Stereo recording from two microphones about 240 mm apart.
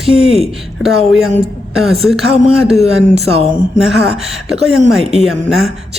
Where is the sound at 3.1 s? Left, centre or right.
Right.